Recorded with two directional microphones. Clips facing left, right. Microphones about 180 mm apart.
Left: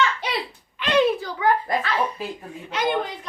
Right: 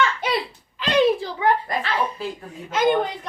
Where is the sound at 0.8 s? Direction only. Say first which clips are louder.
Right 1 dB; 30° right (ahead or behind).